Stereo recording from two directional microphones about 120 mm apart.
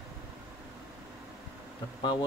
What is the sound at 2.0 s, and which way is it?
Speech, 40° left (ahead or behind).